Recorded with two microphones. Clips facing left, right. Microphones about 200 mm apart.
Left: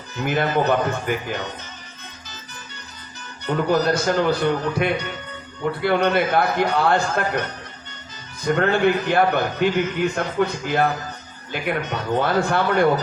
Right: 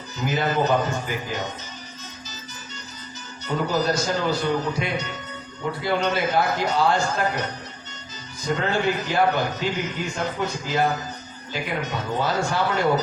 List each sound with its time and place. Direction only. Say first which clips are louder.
0.2 s a man's voice: left 2 dB; 60° left (ahead or behind)
3.4 s a man's voice: left 4 dB; 60° left (ahead or behind)
8.4 s a man's voice: left 5 dB; 60° left (ahead or behind)